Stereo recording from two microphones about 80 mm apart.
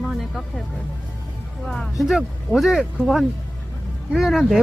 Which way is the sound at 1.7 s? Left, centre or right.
Centre.